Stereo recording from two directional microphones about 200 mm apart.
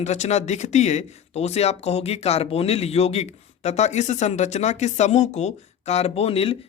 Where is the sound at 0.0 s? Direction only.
35° left (ahead or behind).